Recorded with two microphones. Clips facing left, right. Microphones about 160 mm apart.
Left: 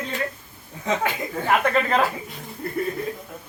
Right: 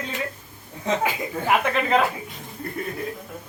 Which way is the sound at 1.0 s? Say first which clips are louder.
Even; 10° right (ahead or behind).